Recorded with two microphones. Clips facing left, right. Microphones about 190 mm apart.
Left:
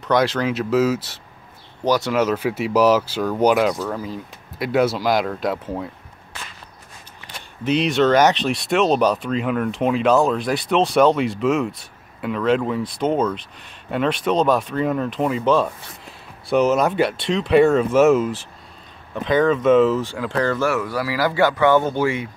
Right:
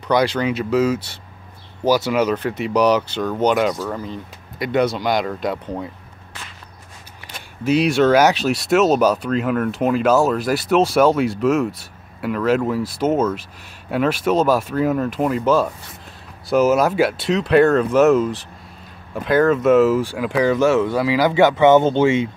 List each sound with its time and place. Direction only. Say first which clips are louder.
0.1 s speech: right 1 dB; centre (ahead or behind)
7.6 s speech: right 2 dB; 5° right (ahead or behind); by 22.3 s 25° right (ahead or behind)